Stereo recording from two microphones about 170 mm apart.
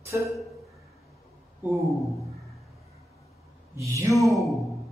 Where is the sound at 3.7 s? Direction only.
15° right (ahead or behind).